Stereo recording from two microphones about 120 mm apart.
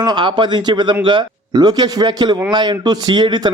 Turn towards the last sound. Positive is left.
turn(degrees=-35)  # may be behind; listen again after turning